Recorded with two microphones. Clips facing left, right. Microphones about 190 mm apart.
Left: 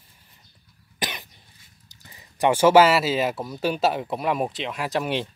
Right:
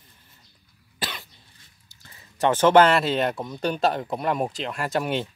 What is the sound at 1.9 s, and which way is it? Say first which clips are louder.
Speech: left 2 dB; 15° left (ahead or behind).